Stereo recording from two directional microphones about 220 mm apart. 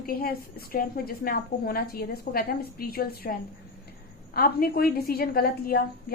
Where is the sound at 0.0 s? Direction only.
45° left (ahead or behind).